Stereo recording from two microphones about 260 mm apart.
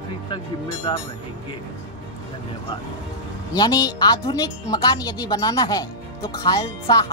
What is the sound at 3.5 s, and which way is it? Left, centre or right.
Speech, centre.